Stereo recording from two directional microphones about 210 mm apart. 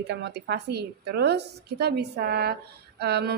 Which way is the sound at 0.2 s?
55° right (ahead or behind).